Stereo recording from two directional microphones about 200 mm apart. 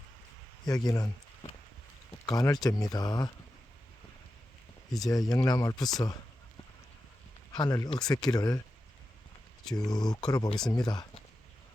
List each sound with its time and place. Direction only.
0.6 s speech: 20° left (ahead or behind)
2.2 s speech: 20° left (ahead or behind)
5.1 s speech: 20° left (ahead or behind)
7.5 s speech: 20° left (ahead or behind)
9.7 s speech: 20° left (ahead or behind)